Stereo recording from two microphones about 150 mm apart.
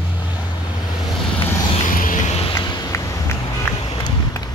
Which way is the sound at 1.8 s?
60° left (ahead or behind).